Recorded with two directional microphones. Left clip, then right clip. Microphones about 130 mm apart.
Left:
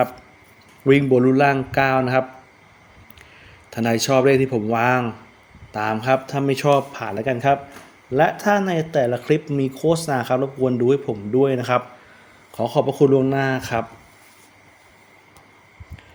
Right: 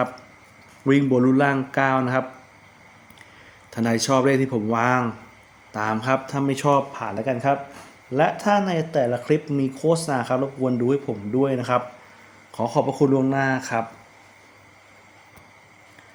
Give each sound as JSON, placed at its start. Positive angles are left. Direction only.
{"t": 0.9, "sound": "speech", "side_deg": 45}
{"t": 3.7, "sound": "speech", "side_deg": 40}
{"t": 8.1, "sound": "speech", "side_deg": 50}